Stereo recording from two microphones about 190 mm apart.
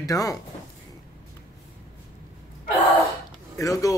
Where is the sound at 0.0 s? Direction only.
20° left (ahead or behind).